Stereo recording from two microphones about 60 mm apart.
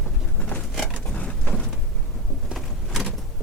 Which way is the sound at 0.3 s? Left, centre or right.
Centre.